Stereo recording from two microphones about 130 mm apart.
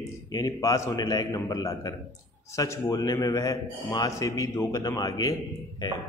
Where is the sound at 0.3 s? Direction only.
30° left (ahead or behind).